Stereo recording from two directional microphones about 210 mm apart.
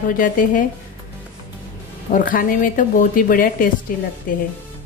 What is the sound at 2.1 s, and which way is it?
A woman's voice, 40° left (ahead or behind).